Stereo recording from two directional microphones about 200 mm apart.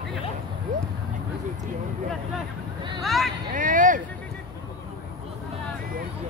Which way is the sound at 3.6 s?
40° right (ahead or behind).